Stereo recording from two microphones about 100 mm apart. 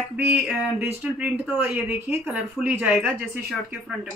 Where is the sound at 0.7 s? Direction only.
20° right (ahead or behind).